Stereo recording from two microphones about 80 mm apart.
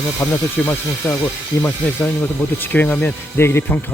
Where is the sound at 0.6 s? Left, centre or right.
Centre.